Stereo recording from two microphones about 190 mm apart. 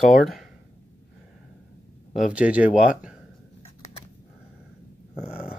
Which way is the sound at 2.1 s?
5° right (ahead or behind).